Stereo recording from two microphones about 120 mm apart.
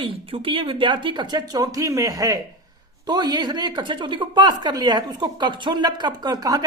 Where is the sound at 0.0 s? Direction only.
50° right (ahead or behind).